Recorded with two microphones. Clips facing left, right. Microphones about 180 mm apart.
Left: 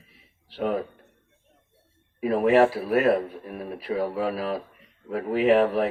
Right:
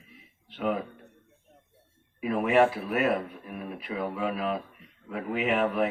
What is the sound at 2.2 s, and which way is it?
Speech, 35° left (ahead or behind).